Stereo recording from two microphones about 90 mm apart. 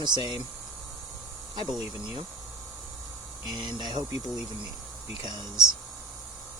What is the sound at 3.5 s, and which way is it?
Speech, 55° right (ahead or behind).